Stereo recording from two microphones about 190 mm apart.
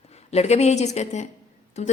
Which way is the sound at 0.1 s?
35° left (ahead or behind).